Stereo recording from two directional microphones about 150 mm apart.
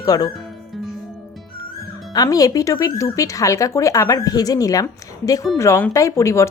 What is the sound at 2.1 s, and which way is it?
Speech, 25° left (ahead or behind).